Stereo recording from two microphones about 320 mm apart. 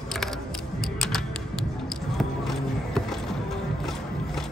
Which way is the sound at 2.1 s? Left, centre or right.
Centre.